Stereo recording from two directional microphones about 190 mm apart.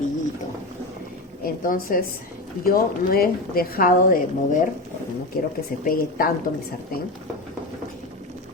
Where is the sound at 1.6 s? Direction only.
45° left (ahead or behind).